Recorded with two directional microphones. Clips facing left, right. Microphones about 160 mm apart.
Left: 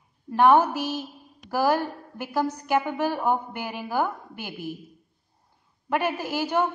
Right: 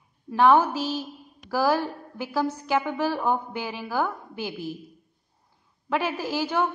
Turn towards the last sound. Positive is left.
turn(degrees=15)  # may be behind; listen again after turning